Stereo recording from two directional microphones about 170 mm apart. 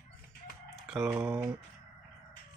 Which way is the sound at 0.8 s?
5° right (ahead or behind).